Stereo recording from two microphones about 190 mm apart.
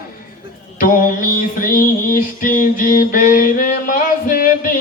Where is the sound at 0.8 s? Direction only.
45° left (ahead or behind).